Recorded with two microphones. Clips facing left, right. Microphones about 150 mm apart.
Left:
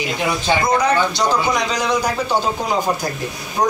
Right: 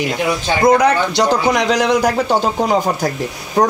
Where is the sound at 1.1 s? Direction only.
70° right (ahead or behind).